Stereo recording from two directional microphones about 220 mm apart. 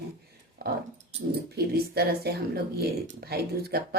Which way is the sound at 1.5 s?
45° right (ahead or behind).